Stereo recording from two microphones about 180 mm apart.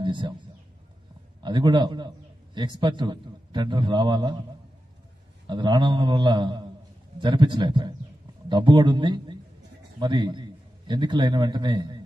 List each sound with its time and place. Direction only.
0.0 s speech: 25° right (ahead or behind)
1.4 s a man's voice: 25° right (ahead or behind)
5.5 s a man's voice: 25° right (ahead or behind)